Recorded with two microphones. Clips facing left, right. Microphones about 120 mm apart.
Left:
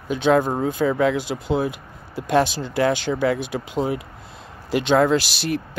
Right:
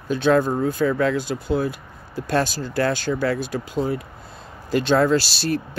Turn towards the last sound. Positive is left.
turn(degrees=15)  # may be behind; listen again after turning